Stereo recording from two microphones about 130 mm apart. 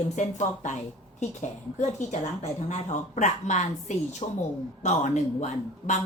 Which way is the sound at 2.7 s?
65° left (ahead or behind).